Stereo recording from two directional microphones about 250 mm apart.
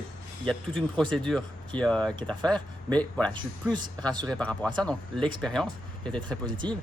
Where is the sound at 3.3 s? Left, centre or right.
Centre.